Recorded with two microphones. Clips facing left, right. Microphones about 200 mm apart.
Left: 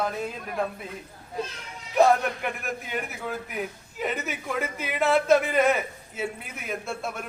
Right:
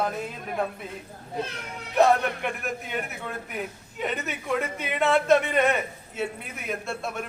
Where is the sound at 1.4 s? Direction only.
60° right (ahead or behind).